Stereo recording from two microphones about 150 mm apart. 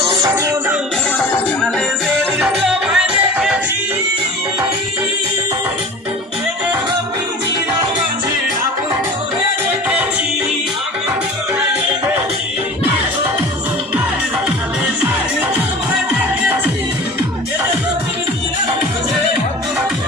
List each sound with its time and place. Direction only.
0.3 s music: 20° right (ahead or behind)
2.0 s music: centre (ahead or behind)